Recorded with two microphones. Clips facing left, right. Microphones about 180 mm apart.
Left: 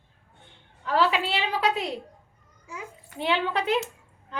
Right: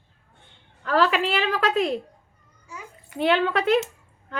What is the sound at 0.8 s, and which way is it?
Speech, 70° right (ahead or behind).